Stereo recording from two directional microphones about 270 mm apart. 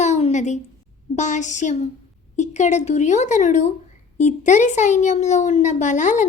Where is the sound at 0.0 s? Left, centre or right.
Left.